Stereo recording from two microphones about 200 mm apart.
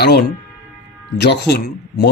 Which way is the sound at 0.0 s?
55° left (ahead or behind).